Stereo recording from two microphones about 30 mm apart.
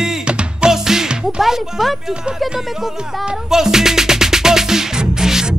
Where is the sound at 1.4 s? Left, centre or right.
Centre.